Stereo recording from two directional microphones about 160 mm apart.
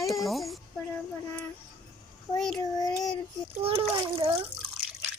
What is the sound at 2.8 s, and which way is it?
Child singing, 25° left (ahead or behind).